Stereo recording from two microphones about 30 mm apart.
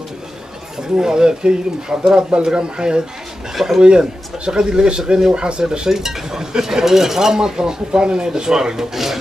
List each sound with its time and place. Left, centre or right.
0.9 s stir: right
2.5 s speech: right
3.5 s speech: centre
4.0 s stir: right
5.3 s speech: right
5.6 s stir: right
8.9 s speech: centre